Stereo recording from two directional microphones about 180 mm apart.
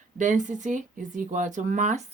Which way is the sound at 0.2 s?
45° right (ahead or behind).